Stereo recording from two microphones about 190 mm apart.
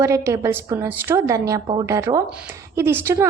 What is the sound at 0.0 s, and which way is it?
A woman's voice, 15° right (ahead or behind).